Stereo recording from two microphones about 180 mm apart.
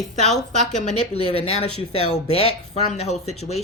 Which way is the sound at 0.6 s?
40° left (ahead or behind).